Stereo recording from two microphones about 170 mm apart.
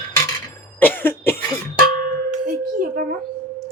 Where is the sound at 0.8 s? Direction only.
10° left (ahead or behind).